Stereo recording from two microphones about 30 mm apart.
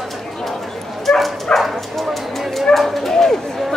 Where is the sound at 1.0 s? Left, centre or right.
Centre.